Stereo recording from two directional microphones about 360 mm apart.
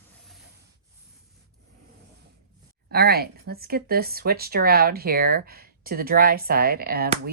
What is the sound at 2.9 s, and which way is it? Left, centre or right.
Speech, right.